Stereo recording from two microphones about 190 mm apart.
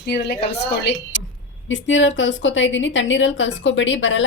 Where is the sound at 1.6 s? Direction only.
80° left.